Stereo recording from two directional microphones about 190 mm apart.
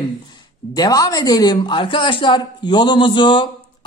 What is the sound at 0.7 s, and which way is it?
A man's voice, 20° left (ahead or behind).